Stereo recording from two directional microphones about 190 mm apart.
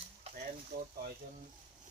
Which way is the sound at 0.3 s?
30° right (ahead or behind).